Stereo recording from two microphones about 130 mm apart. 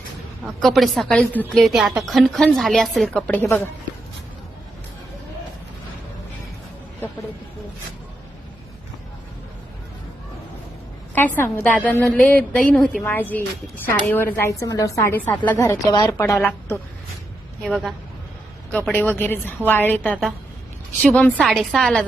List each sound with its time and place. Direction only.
0.4 s a woman's voice: centre (ahead or behind)
11.1 s a woman's voice: 15° left (ahead or behind)
12.7 s a woman's voice: centre (ahead or behind)
13.0 s a woman's voice: 15° left (ahead or behind)
17.6 s a woman's voice: centre (ahead or behind)
18.7 s a woman's voice: 15° left (ahead or behind)
21.4 s a woman's voice: centre (ahead or behind)